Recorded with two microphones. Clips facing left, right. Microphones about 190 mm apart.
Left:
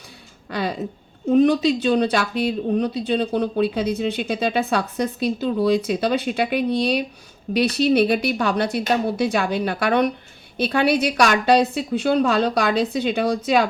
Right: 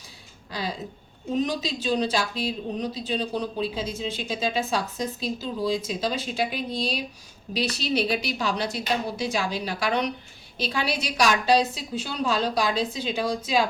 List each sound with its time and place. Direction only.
0.5 s speech: 60° left (ahead or behind)